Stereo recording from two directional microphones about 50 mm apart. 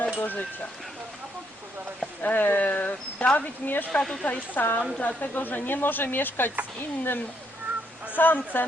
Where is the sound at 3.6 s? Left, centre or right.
Left.